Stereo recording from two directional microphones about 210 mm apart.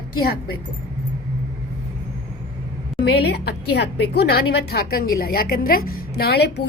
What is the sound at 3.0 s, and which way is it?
A woman's voice, 50° left (ahead or behind).